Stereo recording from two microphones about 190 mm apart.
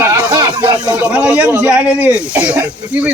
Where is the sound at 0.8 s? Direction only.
5° right (ahead or behind).